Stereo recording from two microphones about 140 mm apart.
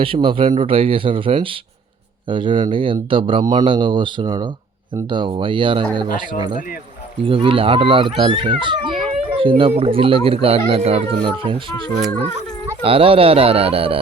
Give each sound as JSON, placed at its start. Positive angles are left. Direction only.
{"t": 0.0, "sound": "speech", "side_deg": -40}
{"t": 12.8, "sound": "speech", "side_deg": -40}